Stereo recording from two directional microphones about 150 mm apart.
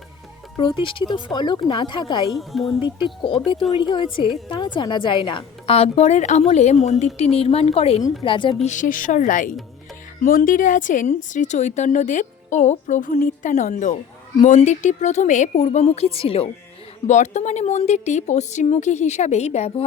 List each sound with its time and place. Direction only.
0.5 s a woman's voice: 30° left (ahead or behind)
2.3 s a woman's voice: centre (ahead or behind)
3.2 s a woman's voice: 35° left (ahead or behind)
8.6 s a woman's voice: 60° left (ahead or behind); by 16.5 s 40° left (ahead or behind)
17.1 s a woman's voice: 50° left (ahead or behind)